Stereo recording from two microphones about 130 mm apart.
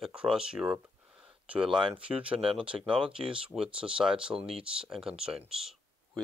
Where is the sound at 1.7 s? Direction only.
40° right (ahead or behind).